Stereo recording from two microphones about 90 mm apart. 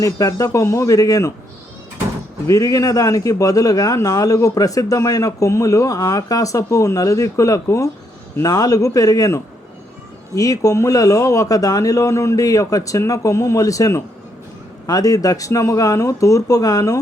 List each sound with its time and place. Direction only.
0.0 s a man's voice: 40° left (ahead or behind)
2.5 s a man's voice: 40° left (ahead or behind)